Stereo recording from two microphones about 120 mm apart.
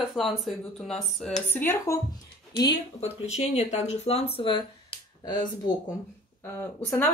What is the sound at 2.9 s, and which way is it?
Speech, 65° left (ahead or behind).